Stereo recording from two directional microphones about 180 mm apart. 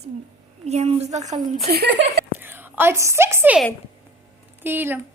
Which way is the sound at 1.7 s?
70° right (ahead or behind).